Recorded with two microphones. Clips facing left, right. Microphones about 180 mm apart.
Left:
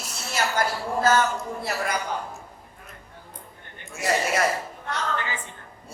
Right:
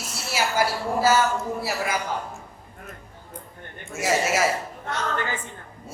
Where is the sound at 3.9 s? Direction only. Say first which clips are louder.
Right 1 dB; 5° right (ahead or behind).